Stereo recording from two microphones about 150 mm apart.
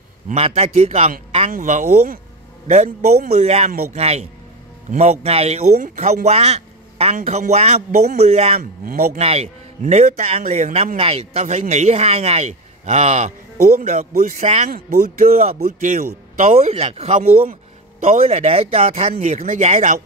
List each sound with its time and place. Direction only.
0.3 s speech: 45° right (ahead or behind)
1.5 s speech: 55° right (ahead or behind)
8.5 s speech: 80° right
9.2 s speech: 45° right (ahead or behind)
13.6 s speech: 80° right
13.8 s speech: 60° right (ahead or behind)
14.7 s speech: 75° right (ahead or behind); by 16.4 s 60° right (ahead or behind)
16.5 s speech: 45° right (ahead or behind)